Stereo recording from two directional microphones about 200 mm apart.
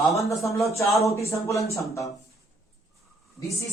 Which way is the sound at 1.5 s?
15° left (ahead or behind).